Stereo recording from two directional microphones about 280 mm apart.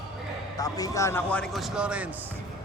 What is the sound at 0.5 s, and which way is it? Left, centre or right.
A man's voice, centre.